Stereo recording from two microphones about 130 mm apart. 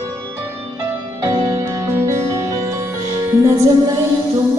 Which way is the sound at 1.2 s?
25° right (ahead or behind).